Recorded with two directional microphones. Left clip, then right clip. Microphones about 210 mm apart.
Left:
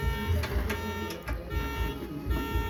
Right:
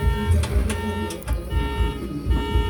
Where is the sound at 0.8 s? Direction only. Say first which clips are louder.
Right 7 dB; 50° left (ahead or behind).